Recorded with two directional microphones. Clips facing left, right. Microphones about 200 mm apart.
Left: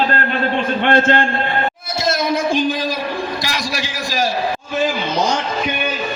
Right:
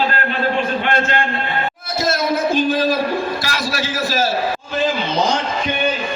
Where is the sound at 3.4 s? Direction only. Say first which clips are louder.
Right 1 dB; 15° left (ahead or behind).